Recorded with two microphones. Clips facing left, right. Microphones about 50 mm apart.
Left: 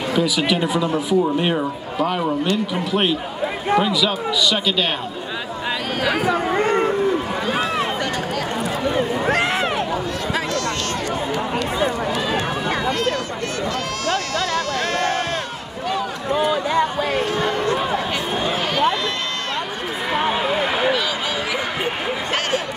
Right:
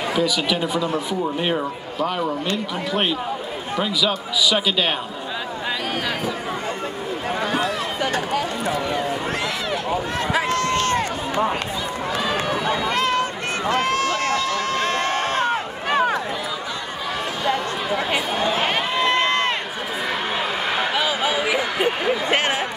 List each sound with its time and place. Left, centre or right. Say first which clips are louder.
0.1 s speech: left 3 dB; centre
6.5 s a sound: left 9 dB; left
10.5 s run: right 3 dB; right
17.9 s run: even; right